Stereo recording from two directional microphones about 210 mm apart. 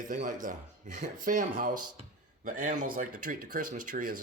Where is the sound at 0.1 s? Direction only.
40° right (ahead or behind).